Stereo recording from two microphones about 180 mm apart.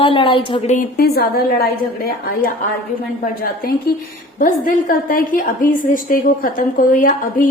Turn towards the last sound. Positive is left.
turn(degrees=50)  # may be behind; listen again after turning